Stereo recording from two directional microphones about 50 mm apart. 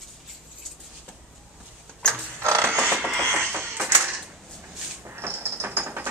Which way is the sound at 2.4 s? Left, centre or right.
Right.